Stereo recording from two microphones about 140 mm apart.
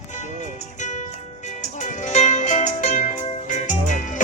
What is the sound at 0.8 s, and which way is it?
Music, 60° left (ahead or behind).